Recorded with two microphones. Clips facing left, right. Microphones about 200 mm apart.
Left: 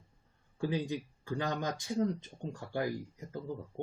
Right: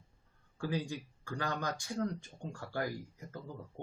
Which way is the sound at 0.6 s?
20° left (ahead or behind).